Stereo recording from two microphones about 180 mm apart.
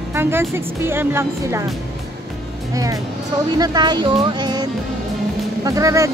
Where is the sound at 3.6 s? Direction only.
25° right (ahead or behind).